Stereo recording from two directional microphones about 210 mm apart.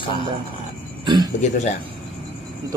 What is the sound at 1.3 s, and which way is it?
Speech, 35° left (ahead or behind).